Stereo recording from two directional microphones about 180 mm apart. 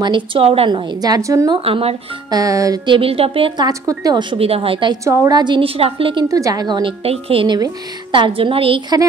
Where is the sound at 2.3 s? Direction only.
20° right (ahead or behind).